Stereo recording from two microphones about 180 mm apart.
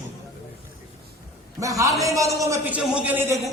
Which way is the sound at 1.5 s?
15° right (ahead or behind).